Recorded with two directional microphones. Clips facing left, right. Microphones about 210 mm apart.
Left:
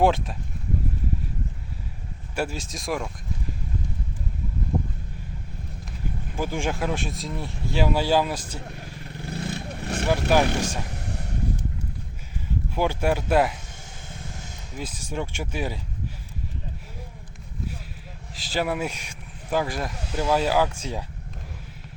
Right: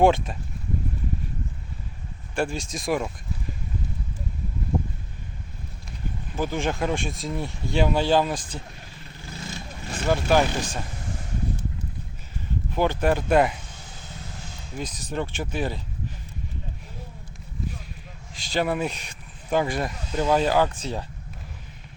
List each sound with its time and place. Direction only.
0.0 s speech: centre (ahead or behind)
2.3 s speech: 5° left (ahead or behind)
6.3 s speech: 10° left (ahead or behind)
9.0 s vehicle: 60° left (ahead or behind)
10.1 s speech: 10° left (ahead or behind)
12.7 s speech: 10° left (ahead or behind)
14.8 s speech: 10° left (ahead or behind)
18.3 s speech: 5° left (ahead or behind)